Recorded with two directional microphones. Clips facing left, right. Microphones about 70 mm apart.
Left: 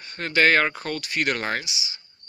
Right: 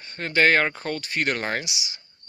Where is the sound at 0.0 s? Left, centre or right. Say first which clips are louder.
Even; right.